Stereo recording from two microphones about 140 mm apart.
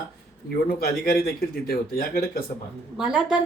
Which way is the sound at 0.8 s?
90° left.